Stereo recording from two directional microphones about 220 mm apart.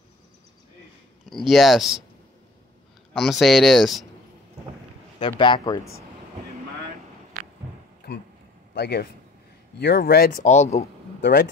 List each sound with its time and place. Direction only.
1.3 s speech: centre (ahead or behind)
3.1 s speech: centre (ahead or behind)
5.4 s speech: 20° left (ahead or behind)
8.0 s a sound: 45° left (ahead or behind)
8.7 s a man's voice: 50° left (ahead or behind); by 10.9 s 30° left (ahead or behind)
11.1 s speech: 50° left (ahead or behind)